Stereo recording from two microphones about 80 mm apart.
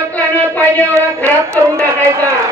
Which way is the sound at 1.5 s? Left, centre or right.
Right.